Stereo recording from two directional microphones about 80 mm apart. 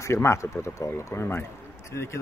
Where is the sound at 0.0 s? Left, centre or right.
Left.